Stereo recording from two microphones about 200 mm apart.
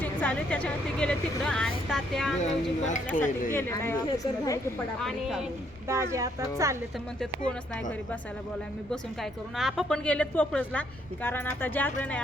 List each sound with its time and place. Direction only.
0.0 s speech: 10° left (ahead or behind)
2.4 s speech: 35° left (ahead or behind)
3.5 s a woman's voice: 10° left (ahead or behind)
4.9 s speech: centre (ahead or behind)
5.9 s speech: 15° right (ahead or behind)
9.6 s a woman's voice: centre (ahead or behind)